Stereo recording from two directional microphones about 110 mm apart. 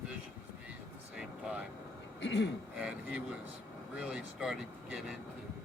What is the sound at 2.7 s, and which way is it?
Speech, 10° right (ahead or behind).